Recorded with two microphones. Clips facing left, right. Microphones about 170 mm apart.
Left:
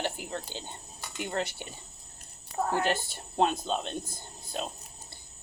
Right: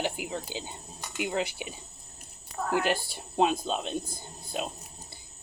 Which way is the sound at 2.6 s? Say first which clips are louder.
Left 3 dB; 35° left (ahead or behind).